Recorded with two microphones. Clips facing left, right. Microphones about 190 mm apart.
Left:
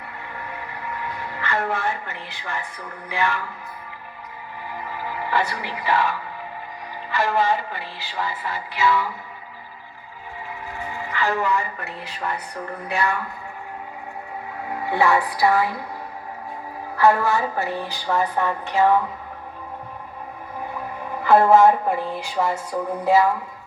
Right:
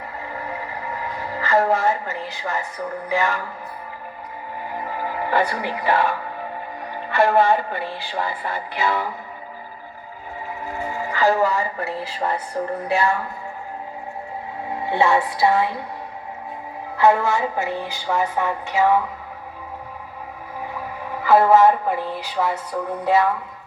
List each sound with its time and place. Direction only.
0.2 s a sound: 35° right (ahead or behind)
4.6 s music: 45° right (ahead or behind)
6.9 s speech: 55° right (ahead or behind)
10.7 s speech: 45° right (ahead or behind)
14.7 s a woman's voice: 25° right (ahead or behind)
17.0 s a woman's voice: 20° right (ahead or behind)
20.7 s speech: 5° right (ahead or behind)
22.7 s music: 10° left (ahead or behind)